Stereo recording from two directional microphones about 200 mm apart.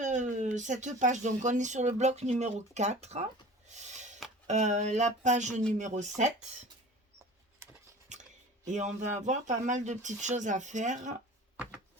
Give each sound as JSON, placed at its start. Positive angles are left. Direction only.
{"t": 0.0, "sound": "speech", "side_deg": -40}
{"t": 3.7, "sound": "a sound", "side_deg": -35}
{"t": 4.4, "sound": "speech", "side_deg": -35}
{"t": 8.1, "sound": "speech", "side_deg": -35}